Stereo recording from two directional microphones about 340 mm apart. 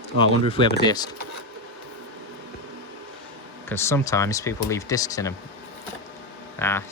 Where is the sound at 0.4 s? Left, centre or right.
Centre.